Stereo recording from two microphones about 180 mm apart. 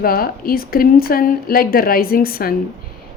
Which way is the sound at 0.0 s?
55° left (ahead or behind).